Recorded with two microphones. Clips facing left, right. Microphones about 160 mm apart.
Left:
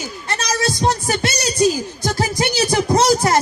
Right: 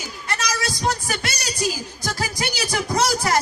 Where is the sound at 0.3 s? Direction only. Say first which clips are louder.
Left 5 dB; 25° left (ahead or behind).